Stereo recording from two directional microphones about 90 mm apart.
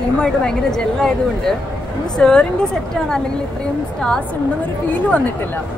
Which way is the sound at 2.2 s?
10° left (ahead or behind).